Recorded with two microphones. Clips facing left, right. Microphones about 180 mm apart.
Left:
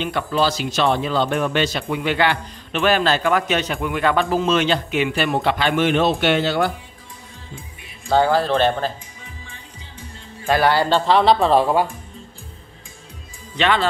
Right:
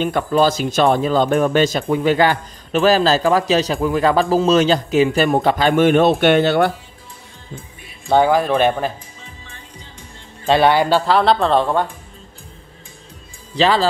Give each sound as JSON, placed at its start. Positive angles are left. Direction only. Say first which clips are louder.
{"t": 0.0, "sound": "speech", "louder": "right 5 dB", "side_deg": -45}
{"t": 8.1, "sound": "speech", "louder": "right 2 dB", "side_deg": -15}
{"t": 10.5, "sound": "speech", "louder": "right 3 dB", "side_deg": -20}
{"t": 13.6, "sound": "speech", "louder": "right 4 dB", "side_deg": -35}